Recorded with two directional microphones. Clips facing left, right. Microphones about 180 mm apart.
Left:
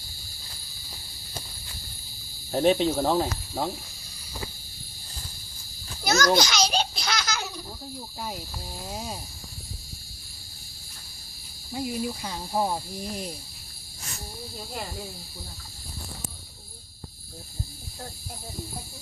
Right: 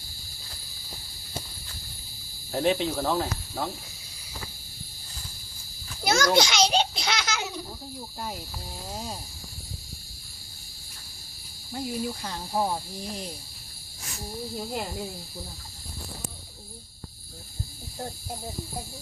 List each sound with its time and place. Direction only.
2.5 s cricket: 30° left (ahead or behind)
6.1 s baby laughter: 25° right (ahead or behind)
8.9 s cricket: 5° left (ahead or behind)
11.7 s cricket: 5° left (ahead or behind)